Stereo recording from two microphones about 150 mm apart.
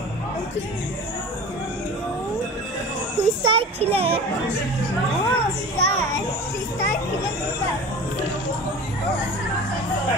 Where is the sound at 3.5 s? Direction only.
40° right (ahead or behind).